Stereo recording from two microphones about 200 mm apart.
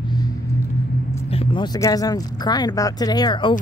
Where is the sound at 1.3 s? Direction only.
25° left (ahead or behind).